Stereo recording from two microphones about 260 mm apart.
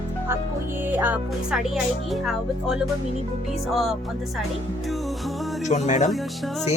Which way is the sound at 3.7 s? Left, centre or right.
Centre.